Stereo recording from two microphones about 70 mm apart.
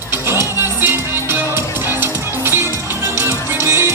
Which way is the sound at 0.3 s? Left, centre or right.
Right.